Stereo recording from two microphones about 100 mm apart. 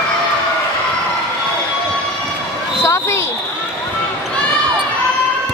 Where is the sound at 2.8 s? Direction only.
25° left (ahead or behind).